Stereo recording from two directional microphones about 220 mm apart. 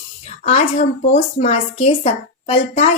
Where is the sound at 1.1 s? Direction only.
25° left (ahead or behind).